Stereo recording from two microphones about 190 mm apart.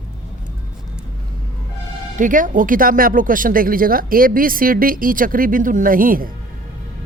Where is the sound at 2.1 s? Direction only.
45° right (ahead or behind).